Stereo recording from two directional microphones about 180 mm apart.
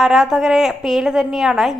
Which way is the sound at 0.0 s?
Centre (ahead or behind).